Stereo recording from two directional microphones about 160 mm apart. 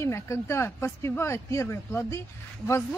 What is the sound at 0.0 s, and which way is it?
A woman's voice, 15° left (ahead or behind).